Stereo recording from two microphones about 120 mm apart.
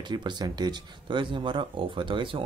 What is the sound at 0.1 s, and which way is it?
Speech, 40° right (ahead or behind).